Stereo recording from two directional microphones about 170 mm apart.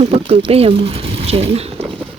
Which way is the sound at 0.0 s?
35° right (ahead or behind).